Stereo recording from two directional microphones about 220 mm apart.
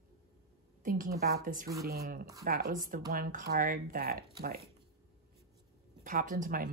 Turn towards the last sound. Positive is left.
turn(degrees=-40)  # may be behind; listen again after turning